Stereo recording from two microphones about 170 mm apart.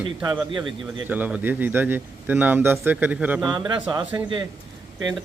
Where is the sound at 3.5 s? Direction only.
25° right (ahead or behind).